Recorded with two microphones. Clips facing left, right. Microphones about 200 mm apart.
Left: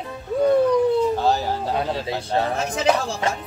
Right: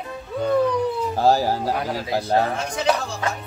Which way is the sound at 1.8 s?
25° left (ahead or behind).